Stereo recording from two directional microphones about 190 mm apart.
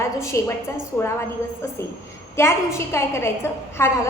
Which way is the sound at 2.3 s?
15° left (ahead or behind).